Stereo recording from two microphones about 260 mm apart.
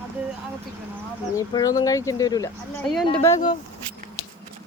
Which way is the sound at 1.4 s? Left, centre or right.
Centre.